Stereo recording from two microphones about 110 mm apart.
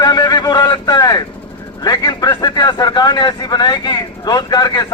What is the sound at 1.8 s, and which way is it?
Speech, 35° left (ahead or behind).